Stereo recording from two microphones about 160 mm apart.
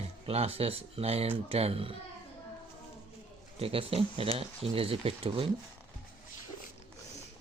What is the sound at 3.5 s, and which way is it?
Speech, 35° right (ahead or behind).